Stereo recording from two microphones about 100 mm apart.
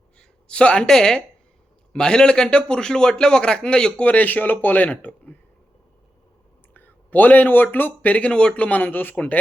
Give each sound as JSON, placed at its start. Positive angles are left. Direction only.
{"t": 0.2, "sound": "a man's voice", "side_deg": 10}
{"t": 6.7, "sound": "a man's voice", "side_deg": 20}